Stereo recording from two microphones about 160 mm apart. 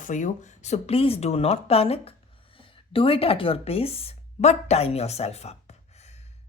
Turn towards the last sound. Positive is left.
turn(degrees=40)  # may be behind; listen again after turning